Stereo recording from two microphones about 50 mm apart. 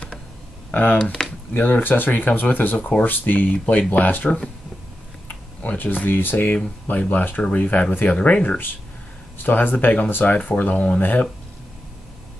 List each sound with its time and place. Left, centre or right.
0.7 s speech: left
5.3 s speech: left
7.4 s speech: left